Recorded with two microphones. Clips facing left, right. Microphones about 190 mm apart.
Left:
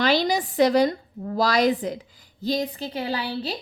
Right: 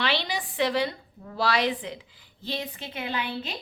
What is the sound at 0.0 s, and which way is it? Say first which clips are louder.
A woman's voice: left 8 dB; 40° left (ahead or behind).